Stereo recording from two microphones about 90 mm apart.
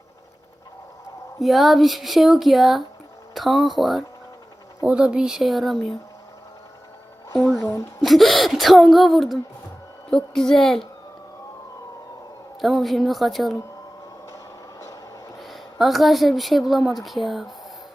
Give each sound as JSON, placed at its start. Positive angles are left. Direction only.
{"t": 1.4, "sound": "speech", "side_deg": 0}
{"t": 7.5, "sound": "a woman's voice", "side_deg": 35}
{"t": 8.0, "sound": "speech", "side_deg": 0}
{"t": 12.6, "sound": "speech", "side_deg": 0}
{"t": 15.4, "sound": "speech", "side_deg": 0}